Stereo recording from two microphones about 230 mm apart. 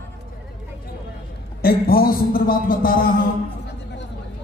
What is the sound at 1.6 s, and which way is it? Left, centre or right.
A man's voice, left.